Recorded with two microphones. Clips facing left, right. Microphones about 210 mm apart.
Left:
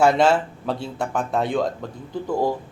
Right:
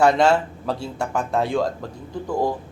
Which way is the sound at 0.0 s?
5° left (ahead or behind).